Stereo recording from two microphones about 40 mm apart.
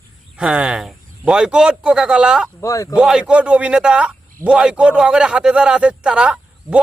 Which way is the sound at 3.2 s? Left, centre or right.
Right.